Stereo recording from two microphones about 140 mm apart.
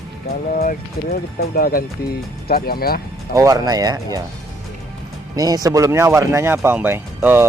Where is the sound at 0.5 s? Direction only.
85° left.